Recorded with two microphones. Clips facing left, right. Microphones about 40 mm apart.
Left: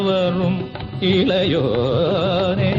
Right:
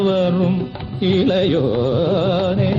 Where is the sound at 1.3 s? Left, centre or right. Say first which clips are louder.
Right 1 dB; left.